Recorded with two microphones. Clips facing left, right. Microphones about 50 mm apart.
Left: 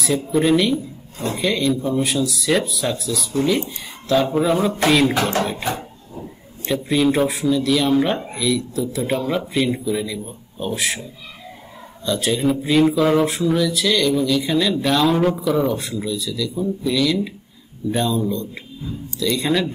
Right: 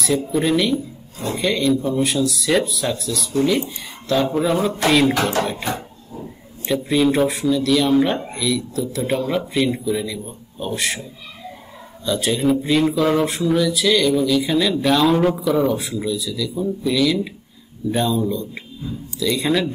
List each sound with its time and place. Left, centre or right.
0.0 s speech: centre
12.0 s speech: centre